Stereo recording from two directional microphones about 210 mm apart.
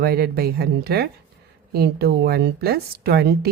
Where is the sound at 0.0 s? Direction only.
45° right (ahead or behind).